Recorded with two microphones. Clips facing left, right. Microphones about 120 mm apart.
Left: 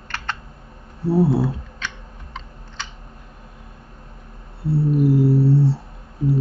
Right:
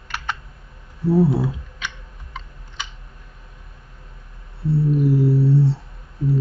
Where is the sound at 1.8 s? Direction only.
15° right (ahead or behind).